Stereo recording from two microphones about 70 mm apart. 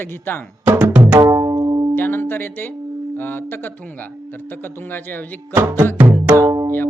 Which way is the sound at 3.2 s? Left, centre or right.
Left.